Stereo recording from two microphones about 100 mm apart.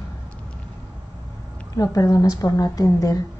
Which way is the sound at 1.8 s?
35° left (ahead or behind).